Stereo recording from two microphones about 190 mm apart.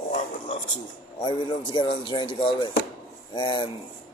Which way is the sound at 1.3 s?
25° left (ahead or behind).